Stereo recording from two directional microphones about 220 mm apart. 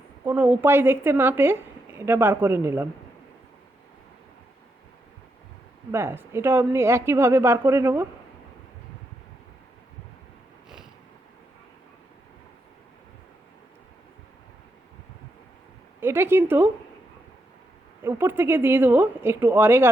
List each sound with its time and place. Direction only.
0.3 s a woman's voice: 10° right (ahead or behind)
5.9 s a woman's voice: 10° right (ahead or behind)
16.0 s speech: 10° right (ahead or behind)
18.0 s a woman's voice: 10° right (ahead or behind)